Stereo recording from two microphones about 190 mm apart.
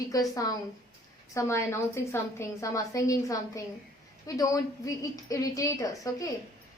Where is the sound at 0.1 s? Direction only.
20° left (ahead or behind).